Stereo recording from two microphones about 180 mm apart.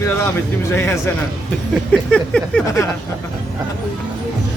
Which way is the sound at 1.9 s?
5° left (ahead or behind).